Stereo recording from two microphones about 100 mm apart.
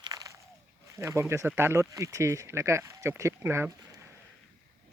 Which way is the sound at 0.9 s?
25° right (ahead or behind).